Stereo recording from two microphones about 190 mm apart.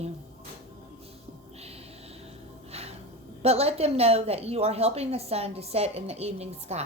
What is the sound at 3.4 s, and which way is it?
A woman's voice, 30° right (ahead or behind).